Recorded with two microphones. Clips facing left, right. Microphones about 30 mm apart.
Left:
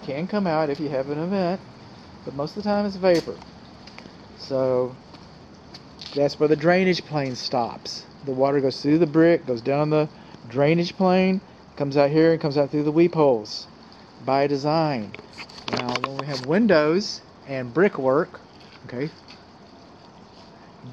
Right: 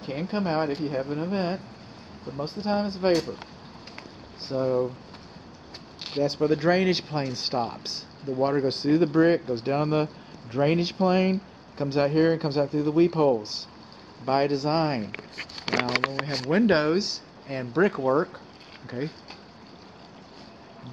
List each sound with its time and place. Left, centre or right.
0.0 s speech: centre
2.3 s speech: centre
3.9 s a sound: centre
6.0 s speech: centre
8.3 s speech: centre
8.6 s speech: centre
13.4 s speech: centre
15.5 s speech: right
16.5 s speech: centre